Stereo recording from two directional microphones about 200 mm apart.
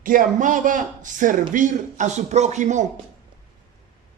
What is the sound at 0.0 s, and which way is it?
A woman's voice, 45° right (ahead or behind).